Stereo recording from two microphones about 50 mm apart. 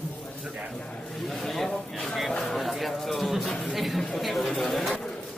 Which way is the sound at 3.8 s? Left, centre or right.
Centre.